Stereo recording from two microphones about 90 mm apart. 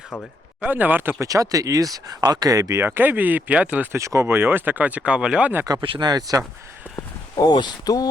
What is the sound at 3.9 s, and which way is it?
Speech, 35° right (ahead or behind).